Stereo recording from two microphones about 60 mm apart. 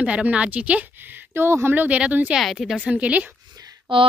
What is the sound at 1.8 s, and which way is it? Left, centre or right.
Speech, right.